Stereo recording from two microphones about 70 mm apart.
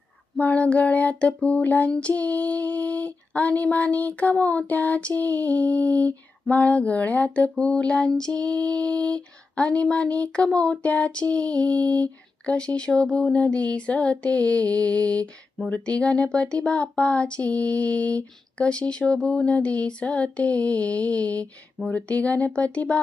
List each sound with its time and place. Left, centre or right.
0.3 s female singing: left
1.4 s speech: centre
1.6 s female singing: left
7.6 s speech: centre
20.0 s female singing: centre